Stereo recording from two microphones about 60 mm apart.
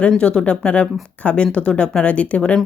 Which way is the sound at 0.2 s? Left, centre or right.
Centre.